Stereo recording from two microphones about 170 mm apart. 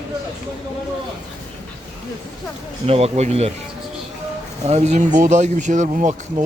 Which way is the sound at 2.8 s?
35° right (ahead or behind).